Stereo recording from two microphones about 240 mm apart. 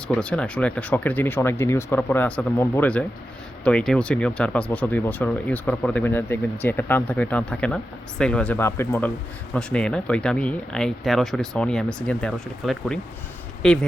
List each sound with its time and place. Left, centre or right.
0.1 s speech: centre